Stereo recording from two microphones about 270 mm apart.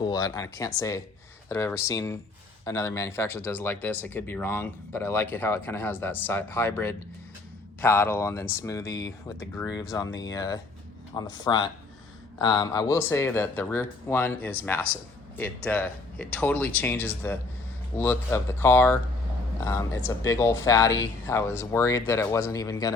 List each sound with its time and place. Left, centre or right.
0.0 s speech: centre